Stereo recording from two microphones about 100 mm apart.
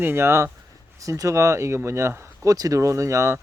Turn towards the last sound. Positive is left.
turn(degrees=-30)  # may be behind; listen again after turning